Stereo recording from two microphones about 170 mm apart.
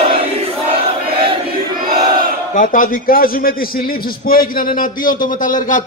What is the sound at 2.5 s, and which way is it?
A man's voice, 50° left (ahead or behind).